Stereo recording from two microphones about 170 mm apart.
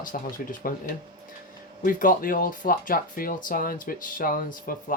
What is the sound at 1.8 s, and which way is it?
Speech, 55° left (ahead or behind).